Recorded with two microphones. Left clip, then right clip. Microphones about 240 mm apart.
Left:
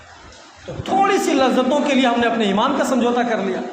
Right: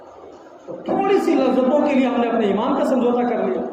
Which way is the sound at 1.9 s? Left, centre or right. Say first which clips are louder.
Left 2 dB; left.